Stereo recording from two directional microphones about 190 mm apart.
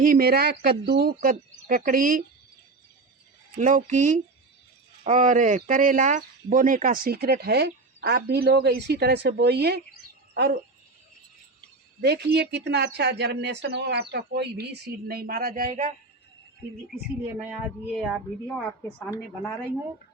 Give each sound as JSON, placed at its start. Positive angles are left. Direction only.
{"t": 0.0, "sound": "speech", "side_deg": -50}
{"t": 3.6, "sound": "speech", "side_deg": -40}
{"t": 11.9, "sound": "speech", "side_deg": -55}
{"t": 17.2, "sound": "a woman's voice", "side_deg": -10}